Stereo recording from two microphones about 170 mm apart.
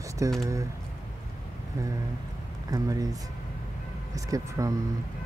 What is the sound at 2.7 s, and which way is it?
Speech, 20° right (ahead or behind).